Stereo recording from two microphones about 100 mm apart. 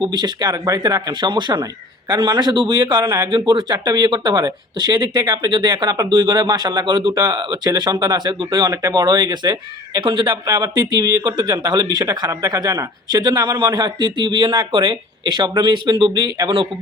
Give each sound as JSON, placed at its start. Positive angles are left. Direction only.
{"t": 0.0, "sound": "speech", "side_deg": -50}
{"t": 10.0, "sound": "speech", "side_deg": -55}
{"t": 10.4, "sound": "speech", "side_deg": -40}
{"t": 12.0, "sound": "speech", "side_deg": -35}